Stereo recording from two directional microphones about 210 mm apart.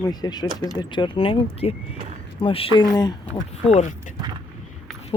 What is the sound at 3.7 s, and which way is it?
Speech, 35° left (ahead or behind).